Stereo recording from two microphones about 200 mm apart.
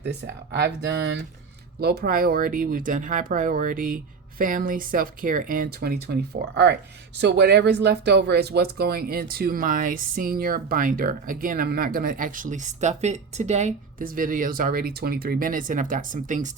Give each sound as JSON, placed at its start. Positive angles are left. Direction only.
{"t": 0.5, "sound": "speech", "side_deg": -55}